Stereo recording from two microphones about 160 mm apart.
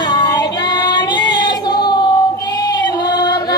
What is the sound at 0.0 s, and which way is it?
Female singing, 25° left (ahead or behind).